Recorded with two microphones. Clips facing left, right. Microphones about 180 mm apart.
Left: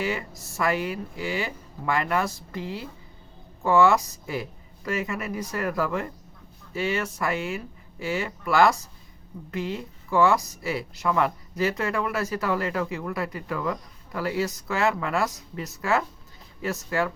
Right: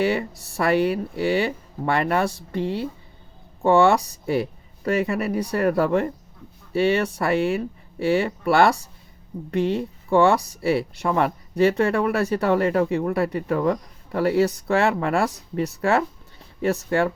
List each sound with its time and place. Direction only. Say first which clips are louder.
0.0 s speech: right 7 dB; 35° right (ahead or behind)